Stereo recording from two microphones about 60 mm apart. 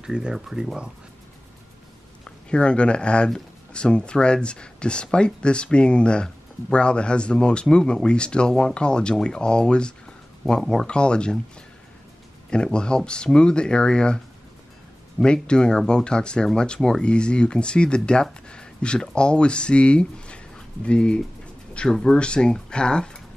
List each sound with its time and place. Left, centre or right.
0.0 s speech: centre
2.5 s speech: centre
12.4 s speech: centre